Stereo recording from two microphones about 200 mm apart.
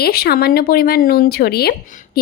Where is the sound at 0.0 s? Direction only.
50° left (ahead or behind).